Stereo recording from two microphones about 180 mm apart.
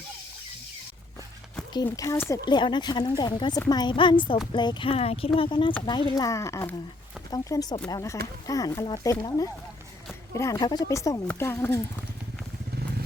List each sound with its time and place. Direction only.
1.7 s a woman's voice: 20° left (ahead or behind)